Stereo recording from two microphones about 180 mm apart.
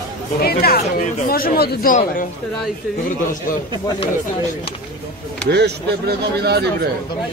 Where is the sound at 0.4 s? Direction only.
60° left (ahead or behind).